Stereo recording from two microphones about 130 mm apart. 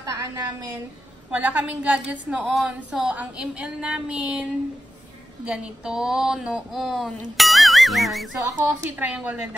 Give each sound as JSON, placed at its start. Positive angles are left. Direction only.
{"t": 1.3, "sound": "a woman's voice", "side_deg": -10}
{"t": 5.4, "sound": "a sound", "side_deg": -5}
{"t": 7.3, "sound": "music", "side_deg": 0}
{"t": 8.4, "sound": "a woman's voice", "side_deg": -20}